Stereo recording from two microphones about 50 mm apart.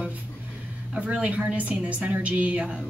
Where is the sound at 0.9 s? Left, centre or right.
Right.